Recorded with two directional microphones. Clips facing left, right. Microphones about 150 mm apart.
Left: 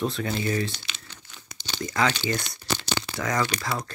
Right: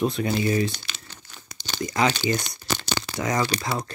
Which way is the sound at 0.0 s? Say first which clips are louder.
Right 4 dB; 15° right (ahead or behind).